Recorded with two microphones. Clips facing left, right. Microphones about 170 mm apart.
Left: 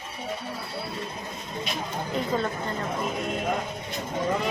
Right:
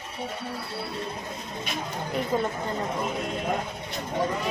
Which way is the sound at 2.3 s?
10° right (ahead or behind).